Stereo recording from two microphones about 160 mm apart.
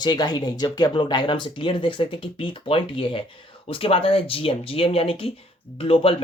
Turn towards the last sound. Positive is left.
turn(degrees=35)  # may be behind; listen again after turning